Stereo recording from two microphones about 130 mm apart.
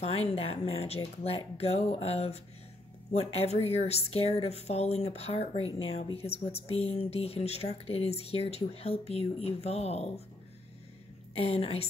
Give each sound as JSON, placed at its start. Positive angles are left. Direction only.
{"t": 0.0, "sound": "speech", "side_deg": 50}
{"t": 11.3, "sound": "speech", "side_deg": 50}